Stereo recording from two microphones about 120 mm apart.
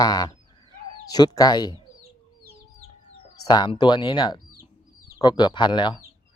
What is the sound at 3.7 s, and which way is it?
Speech, 40° left (ahead or behind).